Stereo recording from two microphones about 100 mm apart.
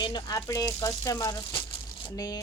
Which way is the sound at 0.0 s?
45° left (ahead or behind).